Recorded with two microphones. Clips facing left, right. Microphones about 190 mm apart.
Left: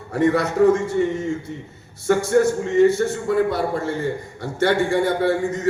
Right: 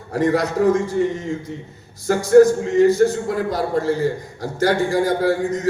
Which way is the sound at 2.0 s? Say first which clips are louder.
Right 5 dB; 35° right (ahead or behind).